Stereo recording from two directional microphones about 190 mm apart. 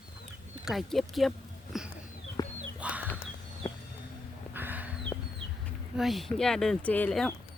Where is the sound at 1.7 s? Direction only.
Centre (ahead or behind).